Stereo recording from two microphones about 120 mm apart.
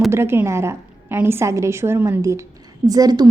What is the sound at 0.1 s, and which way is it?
A woman's voice, 20° right (ahead or behind).